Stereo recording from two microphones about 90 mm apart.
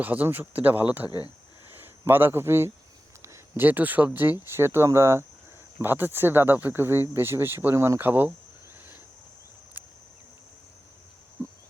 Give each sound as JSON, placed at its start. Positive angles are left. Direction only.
{"t": 0.0, "sound": "speech", "side_deg": -20}
{"t": 1.0, "sound": "speech", "side_deg": 50}
{"t": 1.7, "sound": "speech", "side_deg": -25}
{"t": 3.2, "sound": "a sound", "side_deg": -30}
{"t": 3.7, "sound": "speech", "side_deg": -20}
{"t": 9.7, "sound": "a sound", "side_deg": -20}